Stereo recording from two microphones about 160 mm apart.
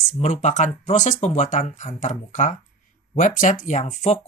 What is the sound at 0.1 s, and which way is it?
Speech, 45° left (ahead or behind).